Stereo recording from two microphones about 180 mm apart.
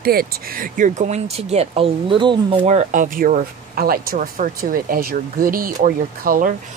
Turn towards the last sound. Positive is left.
turn(degrees=-50)  # may be behind; listen again after turning